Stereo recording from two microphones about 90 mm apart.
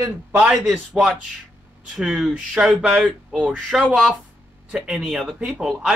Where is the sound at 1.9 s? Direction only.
10° right (ahead or behind).